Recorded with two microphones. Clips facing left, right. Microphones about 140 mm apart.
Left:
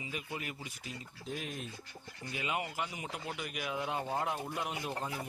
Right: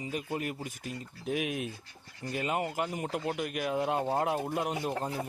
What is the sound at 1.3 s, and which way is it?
Speech, 70° right (ahead or behind).